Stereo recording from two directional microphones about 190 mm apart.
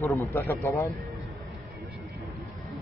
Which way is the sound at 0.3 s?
10° left (ahead or behind).